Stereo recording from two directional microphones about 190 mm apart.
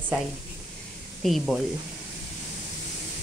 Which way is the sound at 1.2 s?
Centre (ahead or behind).